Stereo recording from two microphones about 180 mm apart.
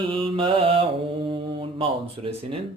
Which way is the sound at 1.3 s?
30° right (ahead or behind).